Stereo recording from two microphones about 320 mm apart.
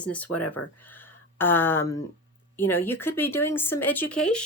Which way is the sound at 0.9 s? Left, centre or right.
Centre.